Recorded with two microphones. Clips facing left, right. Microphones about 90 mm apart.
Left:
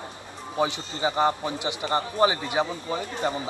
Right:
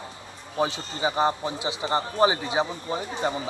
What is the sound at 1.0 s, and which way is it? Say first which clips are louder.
A man's voice: even; 20° right (ahead or behind).